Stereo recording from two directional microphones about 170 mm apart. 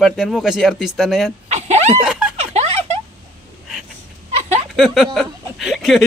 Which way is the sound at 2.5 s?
40° right (ahead or behind).